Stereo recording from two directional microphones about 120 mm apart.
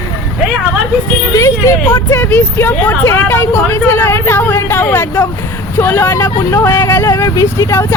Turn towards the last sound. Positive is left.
turn(degrees=25)  # may be behind; listen again after turning